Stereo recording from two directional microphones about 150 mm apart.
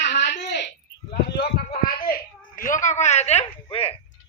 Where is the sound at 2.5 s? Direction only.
60° left (ahead or behind); by 4.0 s 40° left (ahead or behind).